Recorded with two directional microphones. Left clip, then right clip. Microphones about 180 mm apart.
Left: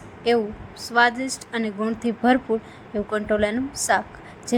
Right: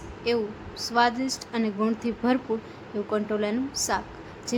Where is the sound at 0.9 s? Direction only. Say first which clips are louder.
Left 4 dB; 15° left (ahead or behind).